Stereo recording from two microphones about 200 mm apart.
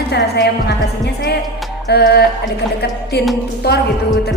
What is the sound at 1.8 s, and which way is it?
A woman's voice, 55° left (ahead or behind).